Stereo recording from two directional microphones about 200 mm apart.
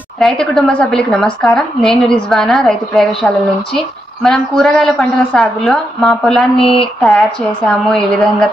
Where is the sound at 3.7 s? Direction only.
Centre (ahead or behind).